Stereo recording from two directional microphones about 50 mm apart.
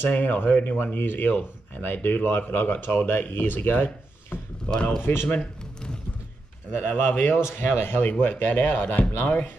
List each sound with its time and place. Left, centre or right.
0.1 s speech: left
4.6 s speech: left
5.3 s a sound: centre
6.8 s speech: left
7.4 s speech: left